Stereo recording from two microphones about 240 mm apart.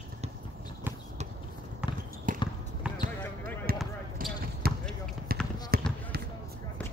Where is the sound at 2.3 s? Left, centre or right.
Right.